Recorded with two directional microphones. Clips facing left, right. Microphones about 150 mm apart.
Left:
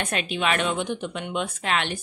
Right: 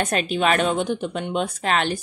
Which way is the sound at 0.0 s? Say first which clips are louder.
Right 5 dB; 40° right (ahead or behind).